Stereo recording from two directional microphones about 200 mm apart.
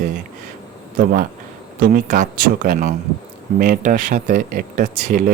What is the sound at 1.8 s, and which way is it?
Speech, 45° right (ahead or behind).